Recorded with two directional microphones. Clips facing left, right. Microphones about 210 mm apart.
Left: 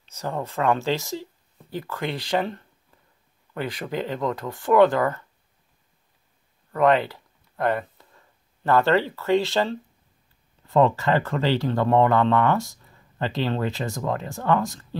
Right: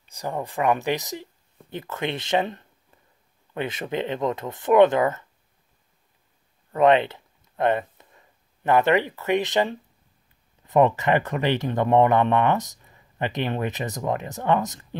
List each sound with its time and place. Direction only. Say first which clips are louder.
0.0 s speech: even; 15° right (ahead or behind)
6.7 s speech: right 2 dB; 20° right (ahead or behind)